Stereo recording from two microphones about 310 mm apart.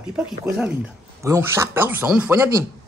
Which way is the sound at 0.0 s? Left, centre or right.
Centre.